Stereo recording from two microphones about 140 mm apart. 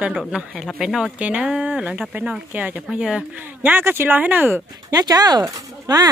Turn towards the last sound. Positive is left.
turn(degrees=-25)  # may be behind; listen again after turning